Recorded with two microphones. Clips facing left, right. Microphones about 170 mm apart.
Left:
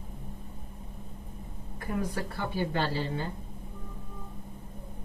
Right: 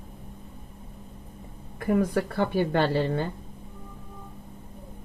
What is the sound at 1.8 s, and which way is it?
Speech, 60° right (ahead or behind).